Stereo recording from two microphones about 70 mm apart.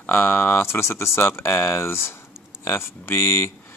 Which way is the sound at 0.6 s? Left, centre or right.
Left.